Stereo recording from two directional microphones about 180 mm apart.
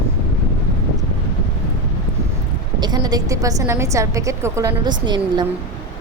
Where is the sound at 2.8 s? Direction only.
20° right (ahead or behind).